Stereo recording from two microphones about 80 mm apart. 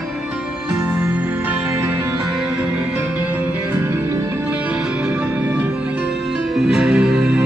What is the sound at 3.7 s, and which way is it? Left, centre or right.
Music, right.